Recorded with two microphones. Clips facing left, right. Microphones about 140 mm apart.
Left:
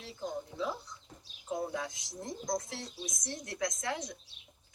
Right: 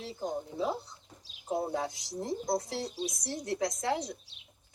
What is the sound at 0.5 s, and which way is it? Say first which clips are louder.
Speech: right 4 dB; 30° right (ahead or behind).